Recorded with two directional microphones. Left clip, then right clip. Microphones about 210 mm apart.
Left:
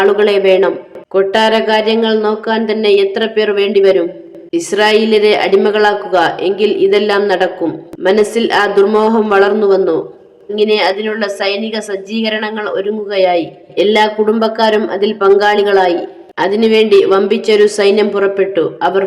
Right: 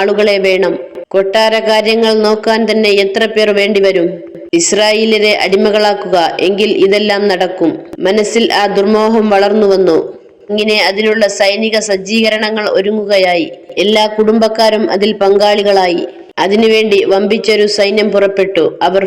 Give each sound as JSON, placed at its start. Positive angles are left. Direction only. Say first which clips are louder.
{"t": 0.0, "sound": "a woman's voice", "louder": "even", "side_deg": -15}